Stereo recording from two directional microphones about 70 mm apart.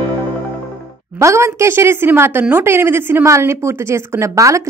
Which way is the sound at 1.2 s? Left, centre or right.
Right.